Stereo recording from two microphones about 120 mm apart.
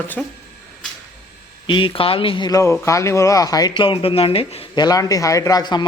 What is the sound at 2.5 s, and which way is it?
A man's voice, 25° left (ahead or behind).